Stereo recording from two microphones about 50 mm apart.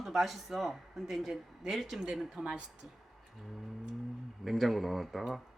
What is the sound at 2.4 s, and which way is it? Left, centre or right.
Speech, right.